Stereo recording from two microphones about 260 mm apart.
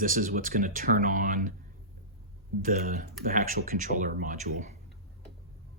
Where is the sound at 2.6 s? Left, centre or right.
Right.